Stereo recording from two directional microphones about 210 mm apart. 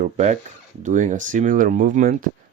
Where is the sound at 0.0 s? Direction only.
35° right (ahead or behind).